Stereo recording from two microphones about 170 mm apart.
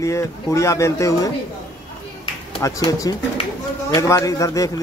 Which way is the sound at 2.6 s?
20° left (ahead or behind).